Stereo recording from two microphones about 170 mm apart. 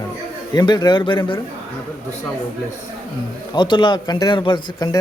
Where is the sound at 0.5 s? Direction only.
25° left (ahead or behind).